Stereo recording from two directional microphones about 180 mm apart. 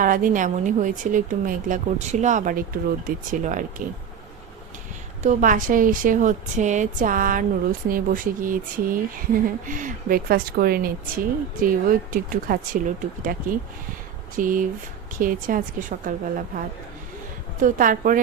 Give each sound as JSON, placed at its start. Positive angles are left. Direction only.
{"t": 0.0, "sound": "speech", "side_deg": -50}
{"t": 5.2, "sound": "speech", "side_deg": -45}